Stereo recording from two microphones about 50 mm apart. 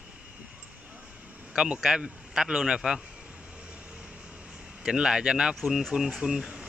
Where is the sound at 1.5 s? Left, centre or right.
Right.